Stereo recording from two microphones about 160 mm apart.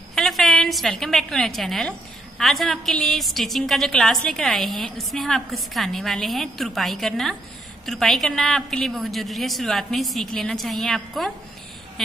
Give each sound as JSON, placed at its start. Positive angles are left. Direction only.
{"t": 0.1, "sound": "a woman's voice", "side_deg": 0}